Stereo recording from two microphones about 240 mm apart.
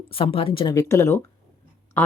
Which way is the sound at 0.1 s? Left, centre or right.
Left.